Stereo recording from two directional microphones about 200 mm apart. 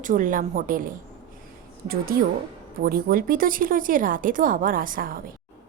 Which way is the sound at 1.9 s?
45° right (ahead or behind).